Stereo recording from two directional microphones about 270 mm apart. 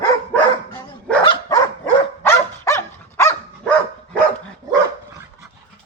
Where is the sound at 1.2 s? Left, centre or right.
Centre.